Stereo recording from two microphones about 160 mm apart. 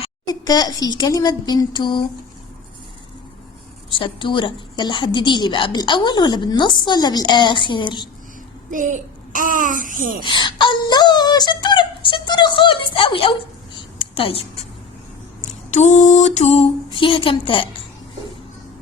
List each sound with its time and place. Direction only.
0.3 s a woman's voice: 25° left (ahead or behind)
3.9 s a woman's voice: 30° left (ahead or behind)
8.7 s a child's voice: 55° right (ahead or behind)
10.2 s speech: 30° left (ahead or behind)
15.4 s a sound: 50° left (ahead or behind); by 17.7 s 35° left (ahead or behind)